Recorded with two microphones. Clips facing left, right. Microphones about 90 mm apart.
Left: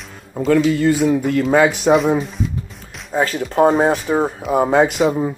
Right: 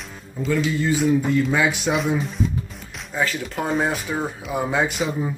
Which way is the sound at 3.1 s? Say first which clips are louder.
Left 8 dB; 40° left (ahead or behind).